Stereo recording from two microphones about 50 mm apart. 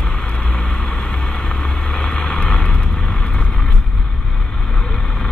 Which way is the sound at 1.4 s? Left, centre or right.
Centre.